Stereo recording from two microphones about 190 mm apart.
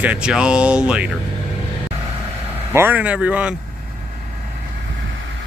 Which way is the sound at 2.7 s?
10° right (ahead or behind).